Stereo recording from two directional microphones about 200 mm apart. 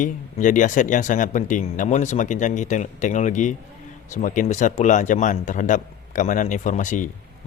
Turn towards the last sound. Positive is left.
turn(degrees=40)  # may be behind; listen again after turning